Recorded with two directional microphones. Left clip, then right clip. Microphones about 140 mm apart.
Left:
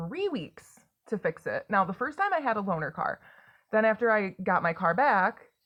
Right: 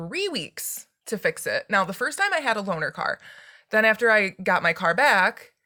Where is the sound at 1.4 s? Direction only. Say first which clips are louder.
Right 3 dB; 35° right (ahead or behind).